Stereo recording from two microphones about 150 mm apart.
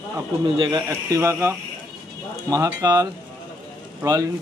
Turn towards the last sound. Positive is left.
turn(degrees=-25)  # may be behind; listen again after turning